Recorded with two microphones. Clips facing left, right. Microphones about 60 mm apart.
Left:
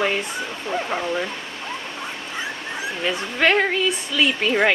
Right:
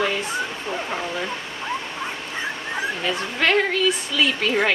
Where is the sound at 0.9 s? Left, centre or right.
Centre.